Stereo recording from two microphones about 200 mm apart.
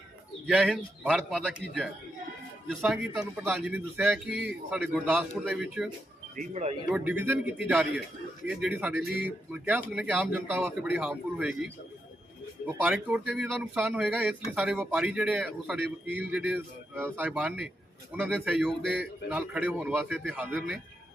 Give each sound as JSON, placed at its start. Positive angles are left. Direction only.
{"t": 0.4, "sound": "a man's voice", "side_deg": 0}
{"t": 2.6, "sound": "a man's voice", "side_deg": 0}
{"t": 6.3, "sound": "speech", "side_deg": -40}
{"t": 6.9, "sound": "a man's voice", "side_deg": -10}